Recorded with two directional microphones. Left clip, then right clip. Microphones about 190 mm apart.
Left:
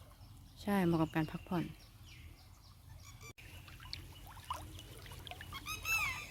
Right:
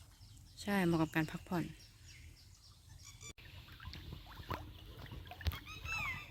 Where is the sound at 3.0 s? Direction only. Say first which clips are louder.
Right 1 dB; 60° left (ahead or behind).